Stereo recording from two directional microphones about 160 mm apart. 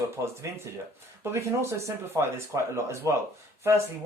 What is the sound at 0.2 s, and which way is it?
Speech, 20° right (ahead or behind).